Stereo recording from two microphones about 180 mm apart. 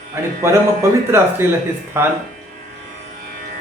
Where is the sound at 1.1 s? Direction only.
15° right (ahead or behind).